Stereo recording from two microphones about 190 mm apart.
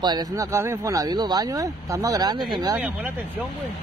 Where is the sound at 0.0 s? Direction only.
20° right (ahead or behind).